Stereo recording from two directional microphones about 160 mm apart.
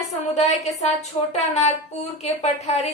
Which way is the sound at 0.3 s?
45° left (ahead or behind).